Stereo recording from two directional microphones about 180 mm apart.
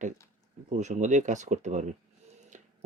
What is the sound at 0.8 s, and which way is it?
Speech, 40° right (ahead or behind).